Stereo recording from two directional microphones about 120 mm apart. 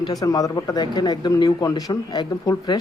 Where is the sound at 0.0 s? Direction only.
30° left (ahead or behind).